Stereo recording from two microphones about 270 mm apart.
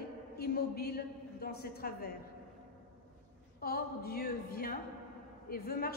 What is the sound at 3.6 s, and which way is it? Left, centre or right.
A woman's voice, left.